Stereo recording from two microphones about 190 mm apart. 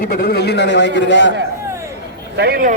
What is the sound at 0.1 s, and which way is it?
A man's voice, 55° left (ahead or behind).